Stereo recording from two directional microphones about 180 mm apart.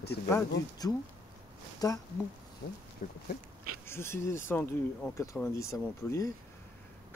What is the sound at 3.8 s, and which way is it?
Speech, 15° left (ahead or behind).